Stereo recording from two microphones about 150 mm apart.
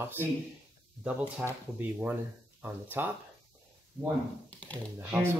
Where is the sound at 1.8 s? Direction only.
10° right (ahead or behind).